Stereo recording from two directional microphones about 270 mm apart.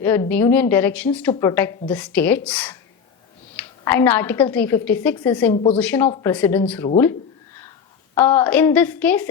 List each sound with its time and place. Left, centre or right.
0.0 s a woman's voice: centre
5.5 s a woman's voice: left
5.8 s a woman's voice: centre
8.1 s a woman's voice: centre